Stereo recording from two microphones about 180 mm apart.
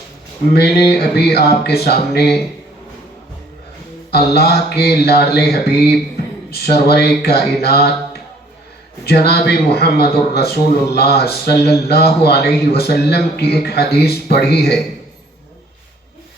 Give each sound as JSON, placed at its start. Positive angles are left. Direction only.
{"t": 0.5, "sound": "speech", "side_deg": 65}
{"t": 4.1, "sound": "speech", "side_deg": 60}
{"t": 9.0, "sound": "speech", "side_deg": 65}